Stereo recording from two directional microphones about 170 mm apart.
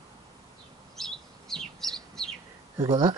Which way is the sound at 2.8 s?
30° right (ahead or behind).